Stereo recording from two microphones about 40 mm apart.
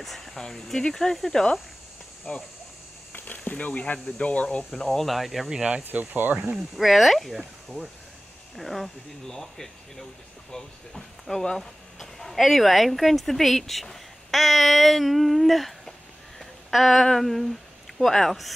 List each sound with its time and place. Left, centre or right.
0.0 s speech: centre
2.3 s speech: left
3.1 s a sound: left
3.6 s speech: left
4.8 s speech: centre
5.9 s speech: right
6.8 s speech: centre
16.3 s a sound: centre
17.0 s speech: centre